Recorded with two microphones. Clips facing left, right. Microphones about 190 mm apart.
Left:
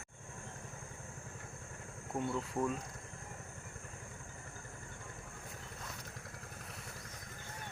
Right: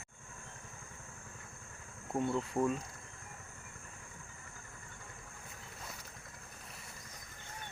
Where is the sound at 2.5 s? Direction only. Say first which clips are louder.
Right 3 dB; centre (ahead or behind).